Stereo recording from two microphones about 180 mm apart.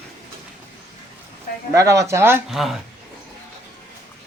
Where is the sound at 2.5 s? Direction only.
Centre (ahead or behind).